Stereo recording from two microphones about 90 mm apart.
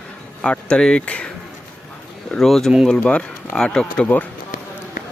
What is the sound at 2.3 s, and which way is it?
Speech, 5° left (ahead or behind).